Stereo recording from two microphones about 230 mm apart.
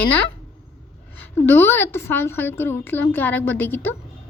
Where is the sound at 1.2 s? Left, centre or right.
Centre.